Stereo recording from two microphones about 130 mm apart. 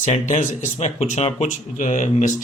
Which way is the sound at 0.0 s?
60° left (ahead or behind).